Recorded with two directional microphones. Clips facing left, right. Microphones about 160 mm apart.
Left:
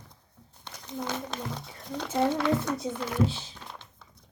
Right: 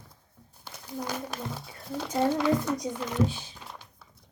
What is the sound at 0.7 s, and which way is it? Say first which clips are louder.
A child's voice: left 1 dB; 10° right (ahead or behind).